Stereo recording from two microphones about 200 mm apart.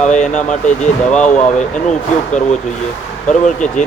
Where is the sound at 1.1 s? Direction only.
35° left (ahead or behind).